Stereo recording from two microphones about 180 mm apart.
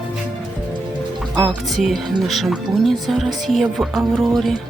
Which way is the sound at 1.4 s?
Centre (ahead or behind).